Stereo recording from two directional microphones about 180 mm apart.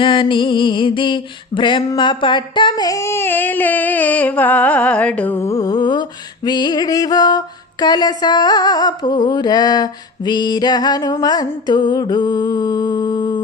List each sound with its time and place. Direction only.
0.0 s music: 30° left (ahead or behind)